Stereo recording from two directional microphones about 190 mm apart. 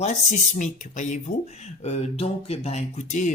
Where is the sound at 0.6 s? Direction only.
40° left (ahead or behind).